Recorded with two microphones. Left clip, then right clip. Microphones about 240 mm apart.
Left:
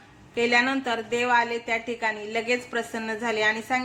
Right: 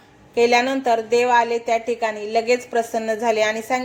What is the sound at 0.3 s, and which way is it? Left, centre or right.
A woman's voice, centre.